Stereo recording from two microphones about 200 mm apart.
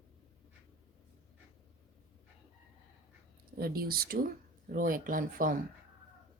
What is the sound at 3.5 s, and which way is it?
Speech, 50° right (ahead or behind).